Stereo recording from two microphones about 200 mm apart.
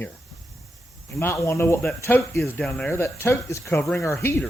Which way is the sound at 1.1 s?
15° left (ahead or behind).